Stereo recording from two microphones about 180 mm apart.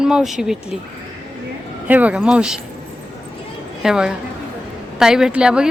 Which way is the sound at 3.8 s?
5° right (ahead or behind).